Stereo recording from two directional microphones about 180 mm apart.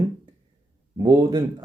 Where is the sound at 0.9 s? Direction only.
20° right (ahead or behind).